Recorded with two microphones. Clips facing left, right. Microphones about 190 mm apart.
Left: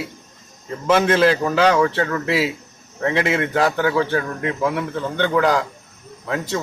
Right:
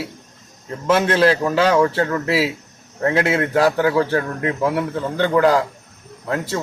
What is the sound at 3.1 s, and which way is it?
A man's voice, 40° right (ahead or behind).